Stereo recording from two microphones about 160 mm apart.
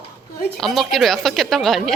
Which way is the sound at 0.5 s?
Centre (ahead or behind).